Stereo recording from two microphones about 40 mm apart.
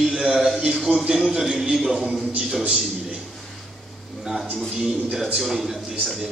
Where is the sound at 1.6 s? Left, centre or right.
Centre.